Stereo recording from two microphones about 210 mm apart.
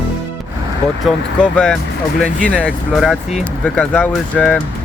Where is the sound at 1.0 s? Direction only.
5° left (ahead or behind).